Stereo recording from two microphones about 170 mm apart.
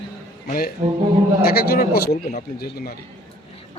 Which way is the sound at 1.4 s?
65° left (ahead or behind).